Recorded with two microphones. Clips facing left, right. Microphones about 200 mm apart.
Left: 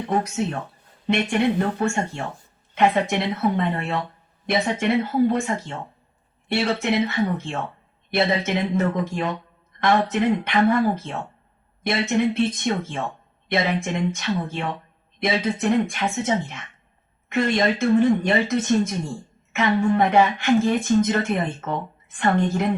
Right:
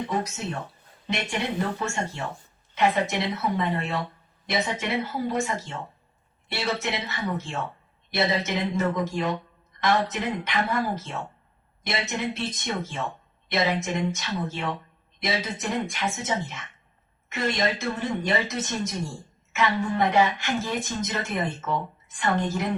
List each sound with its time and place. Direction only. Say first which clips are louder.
0.1 s a woman's voice: left 6 dB; 55° left (ahead or behind)